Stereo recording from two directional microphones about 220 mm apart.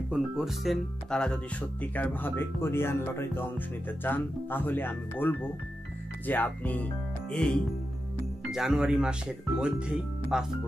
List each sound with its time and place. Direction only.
0.1 s speech: centre (ahead or behind)